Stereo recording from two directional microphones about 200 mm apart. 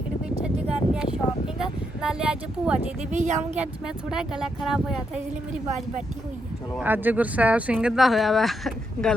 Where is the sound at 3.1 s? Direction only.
35° right (ahead or behind).